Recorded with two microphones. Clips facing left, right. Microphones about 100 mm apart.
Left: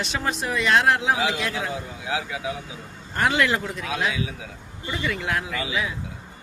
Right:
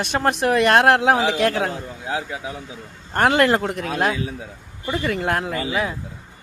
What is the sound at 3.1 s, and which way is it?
A man's voice, 55° right (ahead or behind).